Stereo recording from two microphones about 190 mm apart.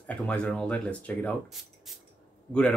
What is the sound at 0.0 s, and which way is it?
Speech, 5° left (ahead or behind).